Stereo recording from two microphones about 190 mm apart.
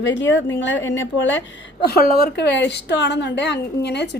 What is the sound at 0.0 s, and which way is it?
A woman's voice, 75° left (ahead or behind).